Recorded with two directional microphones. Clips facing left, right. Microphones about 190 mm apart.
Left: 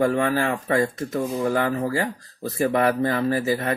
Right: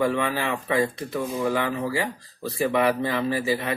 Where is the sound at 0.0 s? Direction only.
45° left (ahead or behind).